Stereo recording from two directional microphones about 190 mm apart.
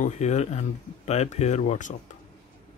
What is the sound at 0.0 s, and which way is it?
Speech, 40° left (ahead or behind).